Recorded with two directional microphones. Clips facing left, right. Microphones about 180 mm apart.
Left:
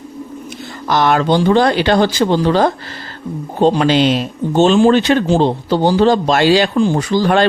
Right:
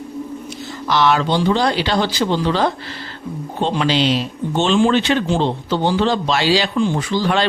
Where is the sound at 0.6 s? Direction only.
45° left (ahead or behind).